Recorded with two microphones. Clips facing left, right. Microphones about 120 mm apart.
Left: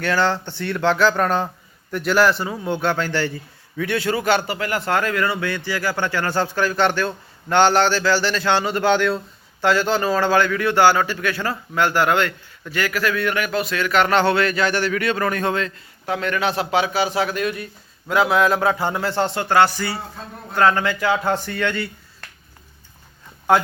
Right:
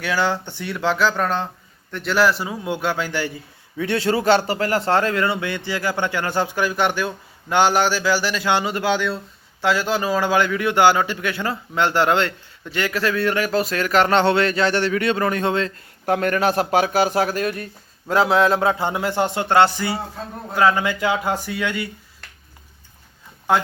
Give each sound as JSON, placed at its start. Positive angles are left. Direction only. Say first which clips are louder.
{"t": 0.0, "sound": "a man's voice", "louder": "left 2 dB", "side_deg": -10}
{"t": 3.8, "sound": "a man's voice", "louder": "right 1 dB", "side_deg": -30}
{"t": 16.0, "sound": "a man's voice", "louder": "right 3 dB", "side_deg": -50}
{"t": 20.5, "sound": "a man's voice", "louder": "even", "side_deg": -5}
{"t": 23.5, "sound": "speech", "louder": "left 2 dB", "side_deg": 0}